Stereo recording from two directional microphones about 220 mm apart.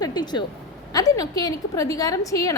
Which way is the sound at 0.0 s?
20° left (ahead or behind).